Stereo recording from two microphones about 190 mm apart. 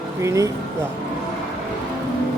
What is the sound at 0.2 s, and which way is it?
Speech, 15° right (ahead or behind).